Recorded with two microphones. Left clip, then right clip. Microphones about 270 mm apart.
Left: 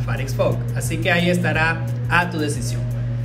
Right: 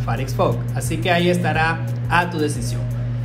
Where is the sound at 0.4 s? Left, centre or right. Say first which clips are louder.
Even; centre.